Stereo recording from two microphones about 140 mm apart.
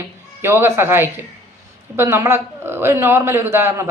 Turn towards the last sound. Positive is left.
turn(degrees=-20)  # may be behind; listen again after turning